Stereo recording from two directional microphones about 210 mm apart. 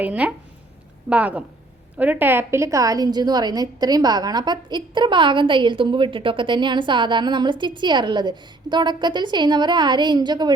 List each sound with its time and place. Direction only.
0.0 s a woman's voice: 5° right (ahead or behind)